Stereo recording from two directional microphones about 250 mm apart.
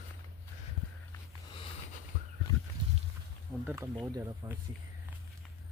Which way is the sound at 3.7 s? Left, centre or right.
Centre.